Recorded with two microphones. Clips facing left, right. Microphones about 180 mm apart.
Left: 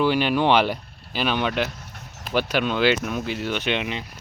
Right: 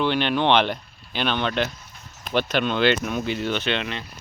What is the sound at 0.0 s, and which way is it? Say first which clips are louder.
Speech: left 2 dB; 5° left (ahead or behind).